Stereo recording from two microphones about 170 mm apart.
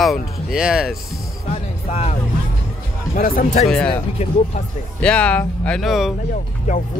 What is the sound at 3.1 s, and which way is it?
Speech, 50° left (ahead or behind).